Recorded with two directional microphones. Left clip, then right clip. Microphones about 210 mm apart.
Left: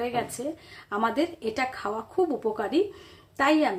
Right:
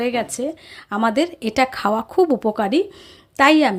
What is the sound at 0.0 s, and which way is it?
A woman's voice, 40° right (ahead or behind).